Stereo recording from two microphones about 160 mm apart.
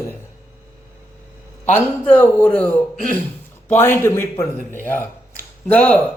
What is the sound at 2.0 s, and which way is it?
Speech, 10° left (ahead or behind).